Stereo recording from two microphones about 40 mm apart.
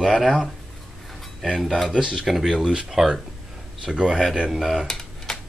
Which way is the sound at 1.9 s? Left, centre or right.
Centre.